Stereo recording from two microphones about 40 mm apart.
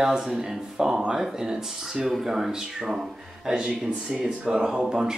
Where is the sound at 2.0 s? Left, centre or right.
Centre.